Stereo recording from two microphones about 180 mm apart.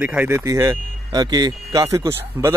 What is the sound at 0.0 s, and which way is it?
Speech, 10° right (ahead or behind).